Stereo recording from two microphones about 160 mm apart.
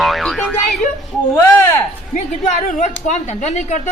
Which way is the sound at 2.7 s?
50° left (ahead or behind).